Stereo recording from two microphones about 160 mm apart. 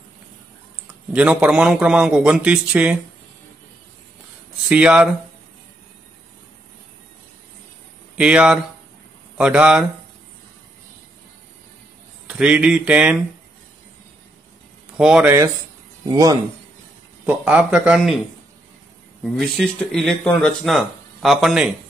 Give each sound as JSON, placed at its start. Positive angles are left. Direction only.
{"t": 1.1, "sound": "a man's voice", "side_deg": -10}
{"t": 4.6, "sound": "speech", "side_deg": -5}
{"t": 8.2, "sound": "a man's voice", "side_deg": -5}
{"t": 12.3, "sound": "a man's voice", "side_deg": -5}
{"t": 15.0, "sound": "speech", "side_deg": -5}
{"t": 16.1, "sound": "speech", "side_deg": -20}
{"t": 17.3, "sound": "speech", "side_deg": -10}
{"t": 19.2, "sound": "speech", "side_deg": 5}